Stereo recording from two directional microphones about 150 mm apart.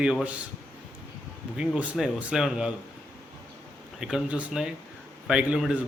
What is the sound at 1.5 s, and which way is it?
A man's voice, 10° right (ahead or behind).